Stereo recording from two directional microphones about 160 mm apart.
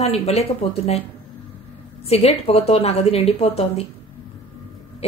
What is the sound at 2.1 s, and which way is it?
A woman's voice, 40° left (ahead or behind).